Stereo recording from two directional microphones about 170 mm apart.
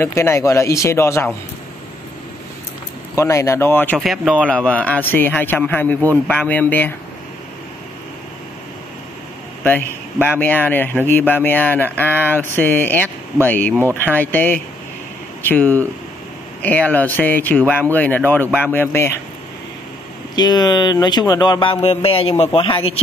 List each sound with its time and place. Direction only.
0.0 s speech: 15° left (ahead or behind)
3.2 s speech: 15° left (ahead or behind)
4.0 s speech: 5° right (ahead or behind)
4.5 s speech: 10° left (ahead or behind)
9.6 s a sound: 10° left (ahead or behind)
10.4 s speech: 10° left (ahead or behind)
20.3 s a man's voice: 25° left (ahead or behind)